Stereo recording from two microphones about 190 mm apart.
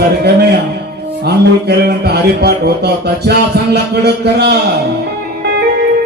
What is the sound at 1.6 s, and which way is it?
Music, 60° right (ahead or behind).